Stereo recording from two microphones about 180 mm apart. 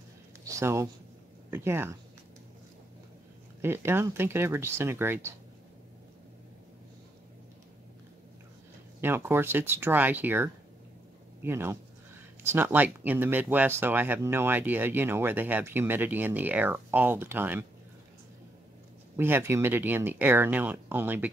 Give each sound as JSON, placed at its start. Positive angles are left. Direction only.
{"t": 0.5, "sound": "speech", "side_deg": -15}
{"t": 3.6, "sound": "speech", "side_deg": -15}
{"t": 9.0, "sound": "speech", "side_deg": -10}
{"t": 19.1, "sound": "speech", "side_deg": -10}